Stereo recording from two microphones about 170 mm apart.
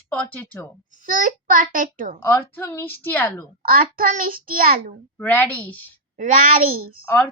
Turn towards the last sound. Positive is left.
turn(degrees=-55)  # may be behind; listen again after turning